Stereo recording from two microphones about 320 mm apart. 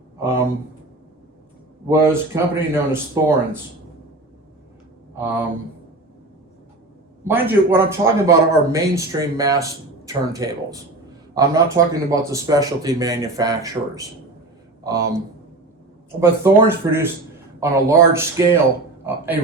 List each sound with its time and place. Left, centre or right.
0.2 s speech: centre
1.9 s speech: centre
5.1 s speech: centre
7.3 s speech: centre
16.2 s speech: centre